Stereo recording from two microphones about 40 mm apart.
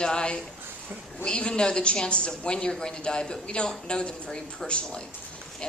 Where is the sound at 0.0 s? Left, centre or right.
Left.